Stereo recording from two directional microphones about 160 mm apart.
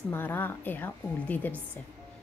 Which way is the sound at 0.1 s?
10° left (ahead or behind).